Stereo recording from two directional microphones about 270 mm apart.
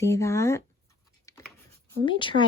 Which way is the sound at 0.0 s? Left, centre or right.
Centre.